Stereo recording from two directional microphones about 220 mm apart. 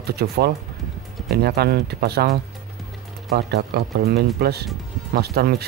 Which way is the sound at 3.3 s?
45° right (ahead or behind).